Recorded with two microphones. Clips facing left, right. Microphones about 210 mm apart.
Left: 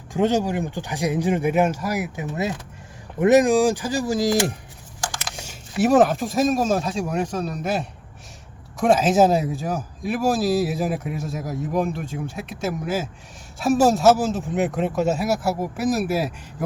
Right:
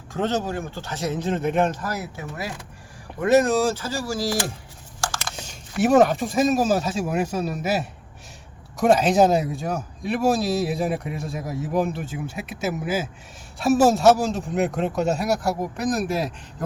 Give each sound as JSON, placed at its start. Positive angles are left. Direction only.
{"t": 0.1, "sound": "speech", "side_deg": 15}
{"t": 5.5, "sound": "speech", "side_deg": 0}